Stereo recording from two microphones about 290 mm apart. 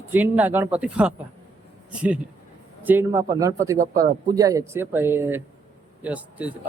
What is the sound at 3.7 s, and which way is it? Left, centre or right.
Speech, right.